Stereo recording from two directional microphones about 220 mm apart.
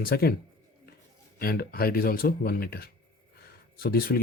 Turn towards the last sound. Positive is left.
turn(degrees=40)  # may be behind; listen again after turning